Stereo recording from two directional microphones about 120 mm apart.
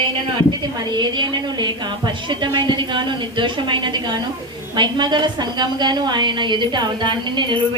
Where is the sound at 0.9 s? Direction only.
40° right (ahead or behind).